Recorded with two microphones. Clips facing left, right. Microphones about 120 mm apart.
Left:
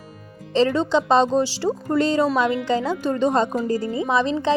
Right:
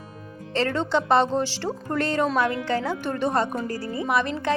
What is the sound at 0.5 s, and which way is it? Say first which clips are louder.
A woman's voice: left 5 dB; 15° left (ahead or behind).